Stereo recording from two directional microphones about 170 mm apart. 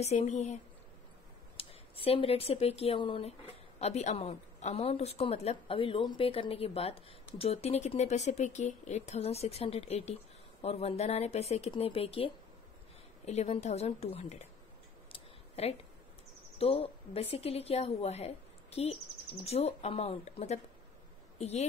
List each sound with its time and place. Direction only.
0.0 s a woman's voice: 40° left (ahead or behind)
1.6 s a woman's voice: 35° left (ahead or behind)
15.1 s a sound: 35° left (ahead or behind)
16.5 s a woman's voice: 35° left (ahead or behind)